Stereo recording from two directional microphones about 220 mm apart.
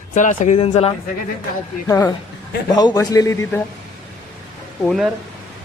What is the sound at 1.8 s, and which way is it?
Speech, 15° left (ahead or behind).